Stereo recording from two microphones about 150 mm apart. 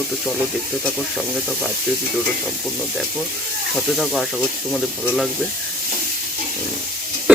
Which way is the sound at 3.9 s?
5° left (ahead or behind).